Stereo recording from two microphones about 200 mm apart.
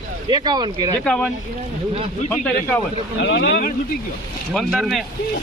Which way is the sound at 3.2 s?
60° left (ahead or behind).